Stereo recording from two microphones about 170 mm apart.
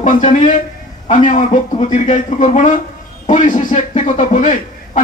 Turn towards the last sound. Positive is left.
turn(degrees=45)  # may be behind; listen again after turning